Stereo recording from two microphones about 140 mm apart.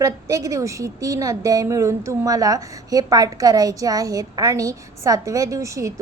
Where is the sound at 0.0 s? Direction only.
25° right (ahead or behind).